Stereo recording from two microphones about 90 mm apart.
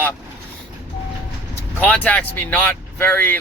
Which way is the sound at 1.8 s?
15° left (ahead or behind).